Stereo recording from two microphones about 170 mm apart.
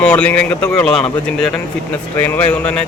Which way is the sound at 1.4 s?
5° left (ahead or behind).